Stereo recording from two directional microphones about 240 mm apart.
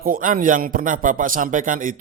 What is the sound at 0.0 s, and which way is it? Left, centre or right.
A man's voice, right.